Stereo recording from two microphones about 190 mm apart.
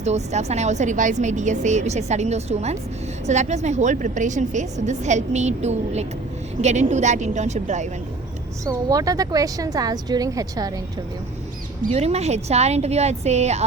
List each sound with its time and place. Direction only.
0.0 s a woman's voice: 35° right (ahead or behind)
8.6 s a woman's voice: 20° right (ahead or behind)
11.8 s a woman's voice: 35° right (ahead or behind)